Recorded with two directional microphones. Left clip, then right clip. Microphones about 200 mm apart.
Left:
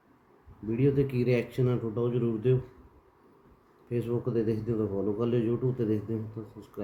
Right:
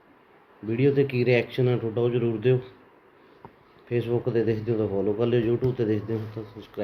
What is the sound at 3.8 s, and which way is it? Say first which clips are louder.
Speech: right 5 dB; 20° left (ahead or behind).